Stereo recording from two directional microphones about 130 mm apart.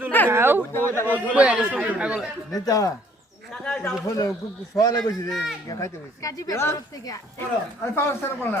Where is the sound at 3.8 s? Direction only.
25° left (ahead or behind).